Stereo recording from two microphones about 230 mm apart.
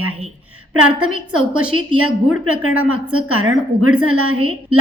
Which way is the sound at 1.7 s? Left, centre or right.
Right.